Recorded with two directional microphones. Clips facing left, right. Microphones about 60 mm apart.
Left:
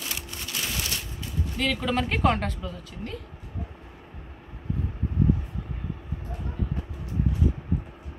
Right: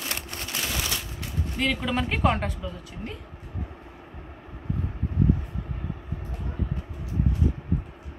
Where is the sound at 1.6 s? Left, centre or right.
Centre.